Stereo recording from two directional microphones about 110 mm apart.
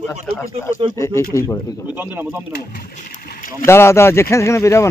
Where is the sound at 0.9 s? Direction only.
25° left (ahead or behind).